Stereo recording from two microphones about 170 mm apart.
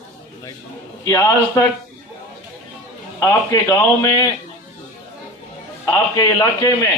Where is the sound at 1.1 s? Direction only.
20° left (ahead or behind).